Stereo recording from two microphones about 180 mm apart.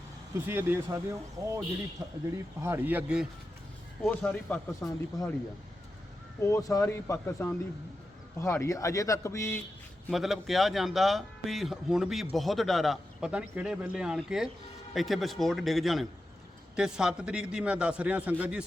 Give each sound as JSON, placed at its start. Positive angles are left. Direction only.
{"t": 0.4, "sound": "speech", "side_deg": -15}
{"t": 4.0, "sound": "a man's voice", "side_deg": 5}
{"t": 6.4, "sound": "a man's voice", "side_deg": 15}
{"t": 10.1, "sound": "a man's voice", "side_deg": 0}